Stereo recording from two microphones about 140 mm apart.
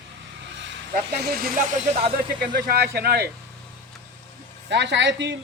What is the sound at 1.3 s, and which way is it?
Speech, 90° right.